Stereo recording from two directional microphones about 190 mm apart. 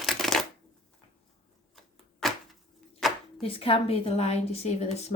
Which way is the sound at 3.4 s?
30° left (ahead or behind).